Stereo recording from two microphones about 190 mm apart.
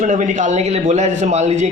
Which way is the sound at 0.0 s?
40° right (ahead or behind).